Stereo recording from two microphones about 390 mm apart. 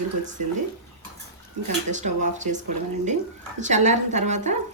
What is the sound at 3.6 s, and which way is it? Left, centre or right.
Speech, centre.